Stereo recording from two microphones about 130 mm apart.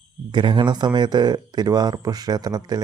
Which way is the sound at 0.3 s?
35° right (ahead or behind).